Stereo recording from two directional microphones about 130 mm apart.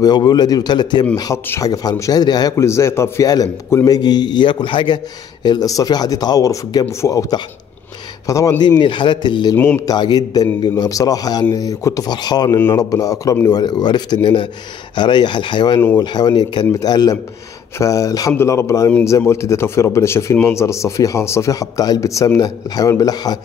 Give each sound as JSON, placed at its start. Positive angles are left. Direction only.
{"t": 0.0, "sound": "speech", "side_deg": 30}
{"t": 8.6, "sound": "speech", "side_deg": 35}
{"t": 9.6, "sound": "speech", "side_deg": 15}
{"t": 9.8, "sound": "speech", "side_deg": 35}